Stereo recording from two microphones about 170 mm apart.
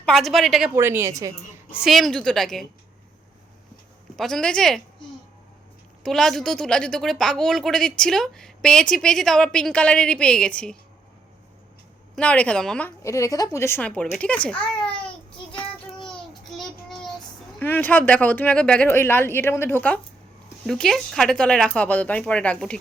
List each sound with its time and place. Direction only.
0.0 s a woman's voice: centre (ahead or behind)
0.8 s a woman's voice: 15° right (ahead or behind)
1.7 s a woman's voice: centre (ahead or behind)
4.2 s a woman's voice: 5° left (ahead or behind)
6.0 s a woman's voice: centre (ahead or behind)
12.1 s a child's voice: 5° left (ahead or behind)
13.0 s a child's voice: 15° left (ahead or behind)
16.0 s a sound: centre (ahead or behind)
20.7 s a woman's voice: centre (ahead or behind)